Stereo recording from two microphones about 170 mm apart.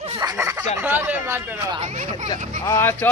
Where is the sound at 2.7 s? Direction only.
15° left (ahead or behind).